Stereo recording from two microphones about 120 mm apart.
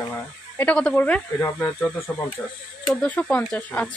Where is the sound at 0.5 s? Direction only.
10° left (ahead or behind).